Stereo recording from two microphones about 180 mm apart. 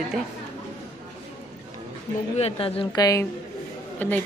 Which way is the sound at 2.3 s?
35° left (ahead or behind).